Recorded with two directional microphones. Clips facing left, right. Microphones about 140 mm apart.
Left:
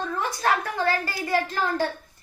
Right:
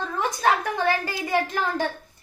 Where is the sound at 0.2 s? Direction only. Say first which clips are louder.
Right 3 dB; 15° right (ahead or behind).